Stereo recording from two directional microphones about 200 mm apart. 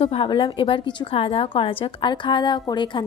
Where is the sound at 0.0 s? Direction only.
30° left (ahead or behind).